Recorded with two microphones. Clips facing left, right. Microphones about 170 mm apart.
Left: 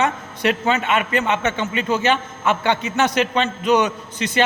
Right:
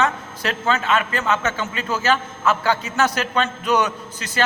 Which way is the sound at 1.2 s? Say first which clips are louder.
Left 1 dB; 20° left (ahead or behind).